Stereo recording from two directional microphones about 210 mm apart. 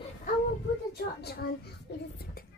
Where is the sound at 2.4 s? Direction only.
45° left (ahead or behind).